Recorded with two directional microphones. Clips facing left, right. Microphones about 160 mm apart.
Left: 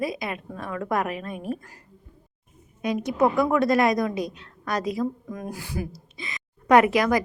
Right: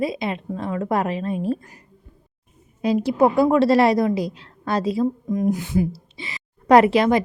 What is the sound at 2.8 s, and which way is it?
A woman's voice, 30° right (ahead or behind).